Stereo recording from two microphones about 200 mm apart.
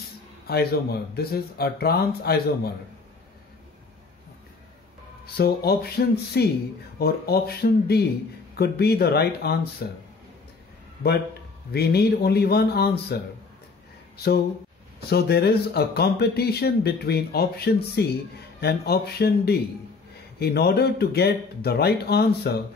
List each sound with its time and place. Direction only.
0.5 s speech: 50° left (ahead or behind)
5.2 s speech: 50° left (ahead or behind)
11.7 s speech: 50° left (ahead or behind)